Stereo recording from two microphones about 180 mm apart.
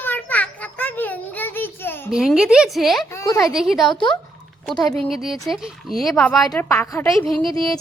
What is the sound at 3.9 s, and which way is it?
Speech, 25° left (ahead or behind).